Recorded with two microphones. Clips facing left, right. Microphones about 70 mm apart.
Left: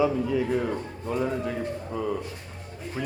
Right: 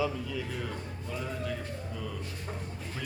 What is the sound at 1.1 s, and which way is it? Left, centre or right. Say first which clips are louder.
Speech: left 10 dB; left.